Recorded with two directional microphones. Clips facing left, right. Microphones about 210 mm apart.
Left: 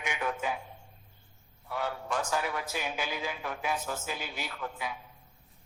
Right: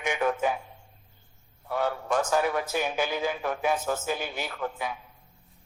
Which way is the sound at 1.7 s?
50° right (ahead or behind).